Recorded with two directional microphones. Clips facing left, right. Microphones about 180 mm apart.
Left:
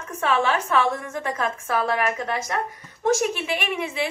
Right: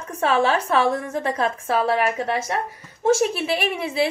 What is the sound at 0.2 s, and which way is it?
A woman's voice, 35° right (ahead or behind).